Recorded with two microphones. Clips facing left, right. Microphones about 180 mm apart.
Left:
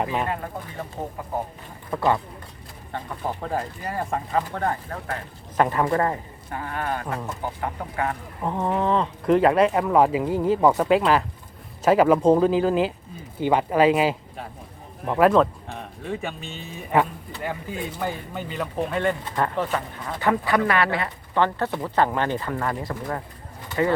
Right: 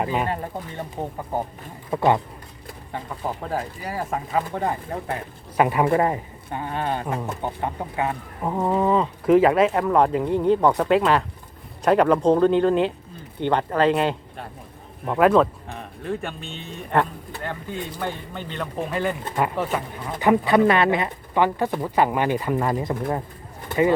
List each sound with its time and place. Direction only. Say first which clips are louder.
0.0 s speech: right 1 dB; centre (ahead or behind)
1.9 s speech: right 3 dB; 20° right (ahead or behind)
3.4 s speech: even; centre (ahead or behind); by 8.1 s 20° right (ahead or behind)
8.4 s speech: right 2 dB; 5° right (ahead or behind)